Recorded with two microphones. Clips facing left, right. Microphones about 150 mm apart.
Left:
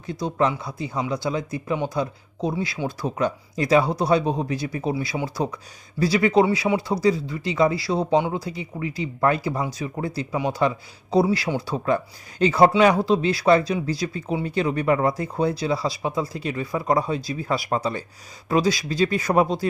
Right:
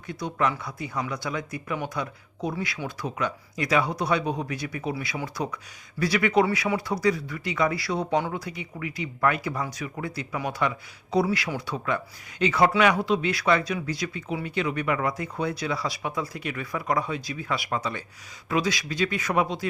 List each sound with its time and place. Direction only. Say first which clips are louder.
0.1 s speech: left 4 dB; 30° left (ahead or behind)